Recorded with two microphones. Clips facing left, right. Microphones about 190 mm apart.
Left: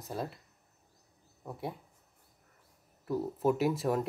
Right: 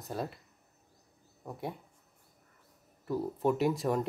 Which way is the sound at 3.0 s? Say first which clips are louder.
Even; centre (ahead or behind).